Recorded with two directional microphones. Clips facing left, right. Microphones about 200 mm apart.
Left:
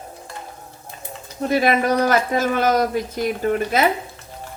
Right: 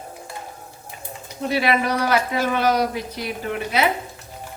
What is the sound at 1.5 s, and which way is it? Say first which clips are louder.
A man's voice: left 3 dB; 45° left (ahead or behind).